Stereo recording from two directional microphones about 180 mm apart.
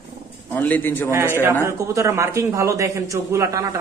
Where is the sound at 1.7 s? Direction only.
15° right (ahead or behind).